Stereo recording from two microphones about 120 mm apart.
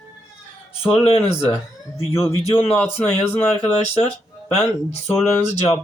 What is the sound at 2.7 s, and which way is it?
Speech, 15° left (ahead or behind).